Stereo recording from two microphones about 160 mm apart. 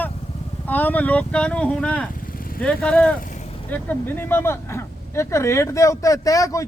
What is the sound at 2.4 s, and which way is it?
Vehicle, 65° left (ahead or behind).